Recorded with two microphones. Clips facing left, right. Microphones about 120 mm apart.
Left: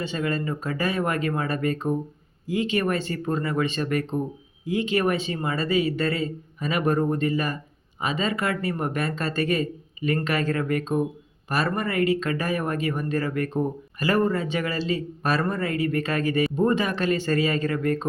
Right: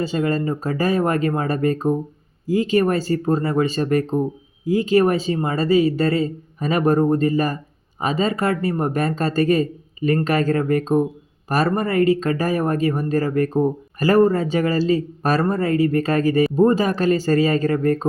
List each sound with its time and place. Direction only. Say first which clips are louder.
0.0 s speech: right 6 dB; 40° right (ahead or behind)